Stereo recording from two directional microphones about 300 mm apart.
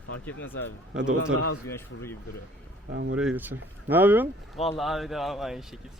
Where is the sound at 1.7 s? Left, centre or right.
Centre.